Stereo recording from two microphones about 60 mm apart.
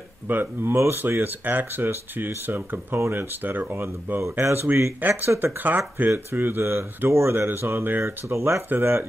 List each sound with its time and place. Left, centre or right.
0.3 s speech: right
5.0 s speech: right
8.0 s speech: right
8.6 s speech: right